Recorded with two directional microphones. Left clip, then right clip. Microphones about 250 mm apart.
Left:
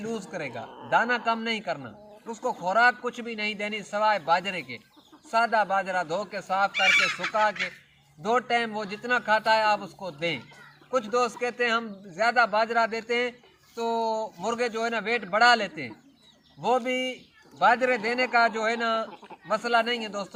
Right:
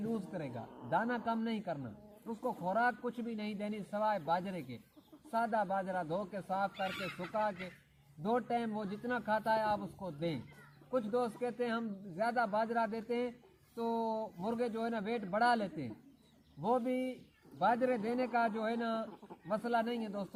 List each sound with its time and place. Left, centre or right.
0.3 s speech: centre
1.8 s speech: left
2.6 s speech: centre
6.7 s fowl: centre
8.2 s speech: centre
9.7 s speech: left
10.2 s speech: centre
13.9 s speech: left
14.4 s speech: centre
16.6 s speech: left
16.8 s speech: centre